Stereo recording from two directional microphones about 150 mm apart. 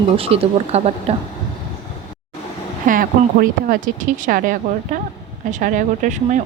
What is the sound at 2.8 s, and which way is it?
Speech, 65° right (ahead or behind).